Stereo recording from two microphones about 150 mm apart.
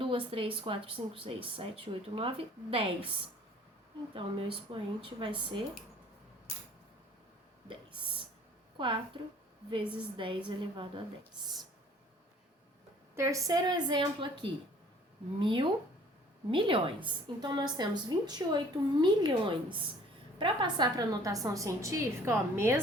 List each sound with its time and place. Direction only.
0.0 s speech: 35° right (ahead or behind)
4.1 s speech: 35° right (ahead or behind)
8.8 s speech: 35° right (ahead or behind)
13.1 s a woman's voice: 20° right (ahead or behind)